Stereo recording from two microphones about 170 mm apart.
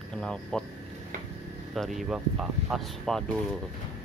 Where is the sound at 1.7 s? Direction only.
Centre (ahead or behind).